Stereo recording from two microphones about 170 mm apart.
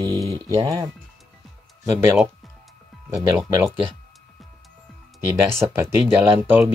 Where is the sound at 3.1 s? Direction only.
15° right (ahead or behind).